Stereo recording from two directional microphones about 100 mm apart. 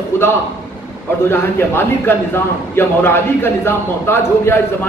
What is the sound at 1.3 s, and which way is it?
A man's voice, 25° left (ahead or behind).